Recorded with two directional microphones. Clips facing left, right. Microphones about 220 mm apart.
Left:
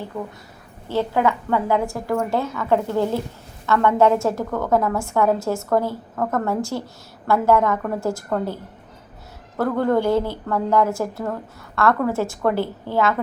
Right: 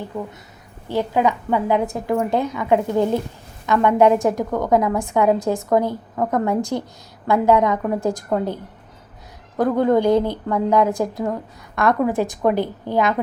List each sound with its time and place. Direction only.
0.1 s a woman's voice: 15° right (ahead or behind)
9.6 s a woman's voice: 15° right (ahead or behind)